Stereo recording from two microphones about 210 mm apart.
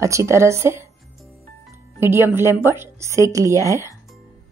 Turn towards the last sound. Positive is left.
turn(degrees=-15)  # may be behind; listen again after turning